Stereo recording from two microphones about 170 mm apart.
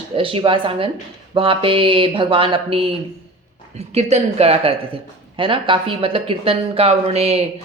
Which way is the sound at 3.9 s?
40° right (ahead or behind).